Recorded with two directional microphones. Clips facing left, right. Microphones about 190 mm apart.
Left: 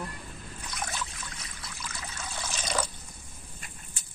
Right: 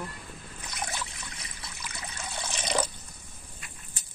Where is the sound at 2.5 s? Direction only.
25° right (ahead or behind).